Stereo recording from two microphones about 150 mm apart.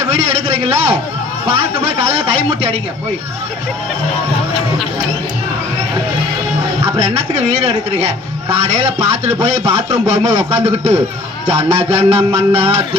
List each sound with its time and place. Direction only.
0.1 s speech: 45° right (ahead or behind)
7.0 s speech: 45° right (ahead or behind)